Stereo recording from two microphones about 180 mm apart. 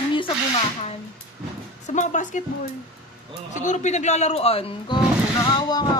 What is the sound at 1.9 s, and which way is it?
Speech, 45° left (ahead or behind).